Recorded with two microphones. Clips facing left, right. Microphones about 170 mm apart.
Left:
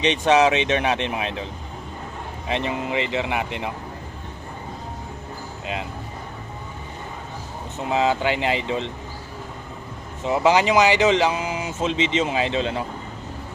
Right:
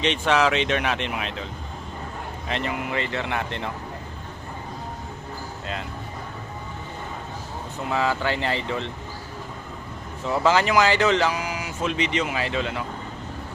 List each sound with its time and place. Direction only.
0.0 s speech: 20° left (ahead or behind)
2.5 s speech: 20° left (ahead or behind)
7.9 s speech: 20° left (ahead or behind)
10.2 s speech: 15° left (ahead or behind)